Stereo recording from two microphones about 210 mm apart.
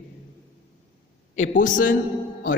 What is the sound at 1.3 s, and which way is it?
Speech, 35° left (ahead or behind).